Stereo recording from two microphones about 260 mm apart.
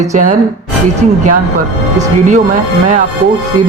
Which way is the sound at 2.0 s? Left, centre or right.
Right.